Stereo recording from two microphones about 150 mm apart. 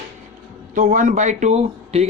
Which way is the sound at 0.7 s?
60° right (ahead or behind).